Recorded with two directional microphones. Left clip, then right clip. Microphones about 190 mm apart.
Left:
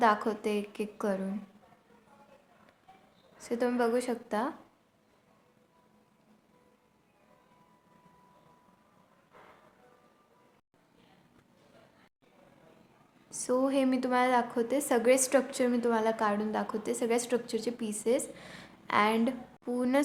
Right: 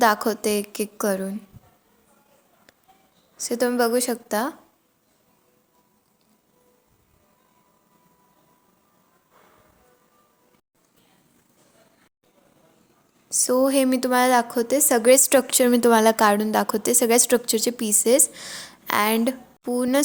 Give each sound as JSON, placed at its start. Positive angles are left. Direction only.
{"t": 0.0, "sound": "a woman's voice", "side_deg": -35}
{"t": 3.4, "sound": "a woman's voice", "side_deg": -35}
{"t": 13.3, "sound": "a woman's voice", "side_deg": -30}